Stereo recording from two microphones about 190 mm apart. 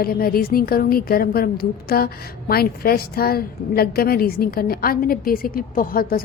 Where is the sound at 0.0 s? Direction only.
50° left (ahead or behind).